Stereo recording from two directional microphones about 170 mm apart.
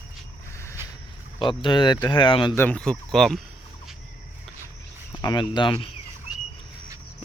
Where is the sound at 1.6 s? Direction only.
30° left (ahead or behind).